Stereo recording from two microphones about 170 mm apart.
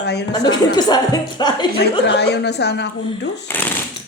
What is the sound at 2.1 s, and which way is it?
A woman's voice, 80° left.